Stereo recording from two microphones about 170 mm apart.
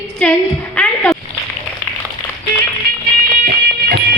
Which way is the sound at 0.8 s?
5° left (ahead or behind).